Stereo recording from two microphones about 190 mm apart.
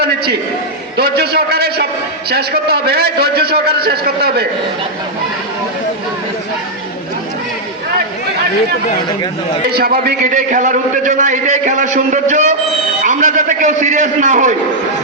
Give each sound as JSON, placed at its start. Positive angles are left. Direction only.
{"t": 0.9, "sound": "a man's voice", "side_deg": -55}
{"t": 9.6, "sound": "a man's voice", "side_deg": -55}